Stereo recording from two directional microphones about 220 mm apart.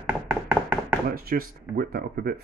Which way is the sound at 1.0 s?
45° right (ahead or behind).